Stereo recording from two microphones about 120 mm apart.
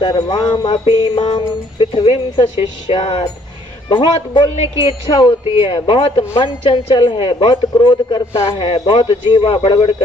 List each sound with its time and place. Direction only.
0.0 s music: 40° left (ahead or behind)
1.8 s a woman's voice: 45° left (ahead or behind)
3.8 s music: 40° left (ahead or behind)
4.8 s a woman's voice: 45° left (ahead or behind)